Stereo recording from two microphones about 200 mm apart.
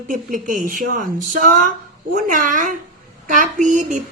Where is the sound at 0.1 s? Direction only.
40° right (ahead or behind).